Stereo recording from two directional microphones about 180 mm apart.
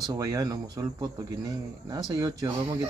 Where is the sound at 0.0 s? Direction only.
20° right (ahead or behind).